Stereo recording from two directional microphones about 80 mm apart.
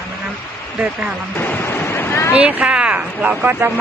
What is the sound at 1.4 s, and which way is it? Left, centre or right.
Waves, left.